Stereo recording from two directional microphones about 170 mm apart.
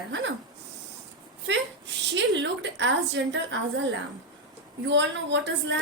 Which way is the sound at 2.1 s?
90° right.